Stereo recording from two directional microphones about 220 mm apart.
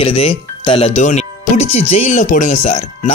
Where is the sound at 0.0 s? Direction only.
25° left (ahead or behind).